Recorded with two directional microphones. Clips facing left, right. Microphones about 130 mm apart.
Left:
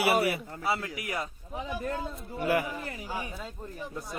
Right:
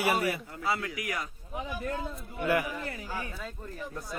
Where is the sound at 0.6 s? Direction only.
25° left (ahead or behind).